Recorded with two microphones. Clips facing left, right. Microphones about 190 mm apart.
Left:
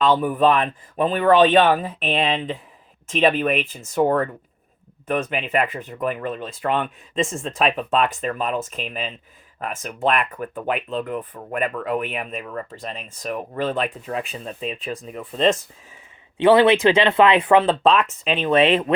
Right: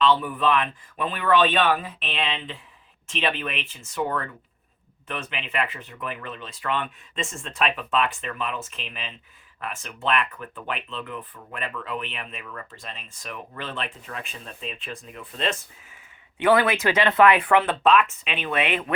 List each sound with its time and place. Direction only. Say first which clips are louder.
0.0 s speech: left 4 dB; 45° left (ahead or behind)
16.4 s speech: left 6 dB; 25° left (ahead or behind)